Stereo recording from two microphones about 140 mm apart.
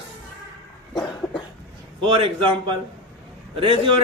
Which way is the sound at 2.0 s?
35° right (ahead or behind).